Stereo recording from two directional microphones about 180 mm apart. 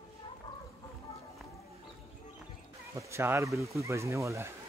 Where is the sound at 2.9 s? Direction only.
15° right (ahead or behind).